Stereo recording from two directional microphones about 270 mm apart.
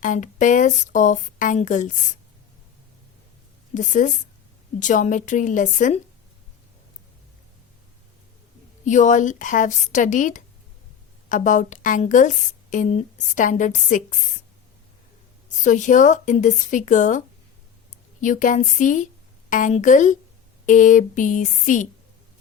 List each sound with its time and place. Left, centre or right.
0.0 s a woman's voice: left
3.8 s a woman's voice: left
8.8 s a woman's voice: left
15.6 s a woman's voice: left